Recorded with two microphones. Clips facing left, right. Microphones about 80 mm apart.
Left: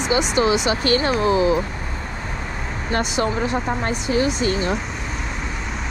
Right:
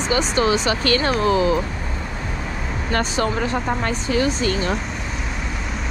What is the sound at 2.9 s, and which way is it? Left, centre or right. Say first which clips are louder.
Speech: even; right.